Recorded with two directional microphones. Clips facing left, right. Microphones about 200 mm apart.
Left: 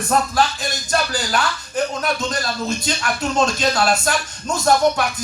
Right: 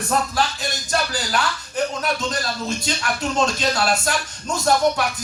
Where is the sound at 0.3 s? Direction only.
45° left (ahead or behind).